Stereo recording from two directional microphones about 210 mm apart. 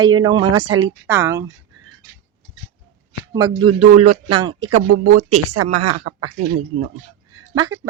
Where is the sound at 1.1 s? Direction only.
15° right (ahead or behind).